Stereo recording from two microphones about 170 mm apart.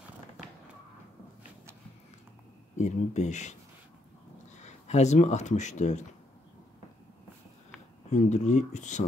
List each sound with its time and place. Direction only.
2.8 s speech: 45° left (ahead or behind)
4.6 s speech: 40° left (ahead or behind)
8.1 s speech: 45° left (ahead or behind)